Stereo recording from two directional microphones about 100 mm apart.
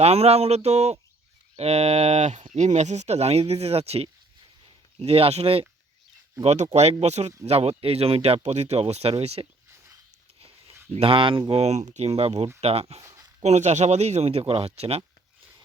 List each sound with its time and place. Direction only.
0.0 s speech: 90° right
4.9 s speech: 80° right
10.9 s speech: 65° right (ahead or behind)
11.5 s speech: 90° right
13.0 s a sound: 35° right (ahead or behind)
13.4 s speech: 90° right